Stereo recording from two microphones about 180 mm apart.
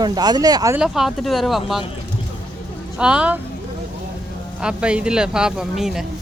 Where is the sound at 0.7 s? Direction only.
5° right (ahead or behind).